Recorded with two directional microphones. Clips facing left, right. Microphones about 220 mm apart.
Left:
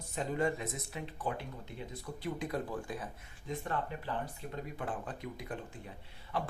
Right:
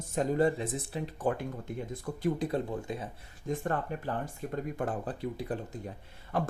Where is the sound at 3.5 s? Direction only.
50° right (ahead or behind).